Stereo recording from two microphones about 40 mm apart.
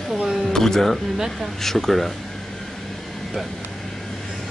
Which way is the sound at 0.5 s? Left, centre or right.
Centre.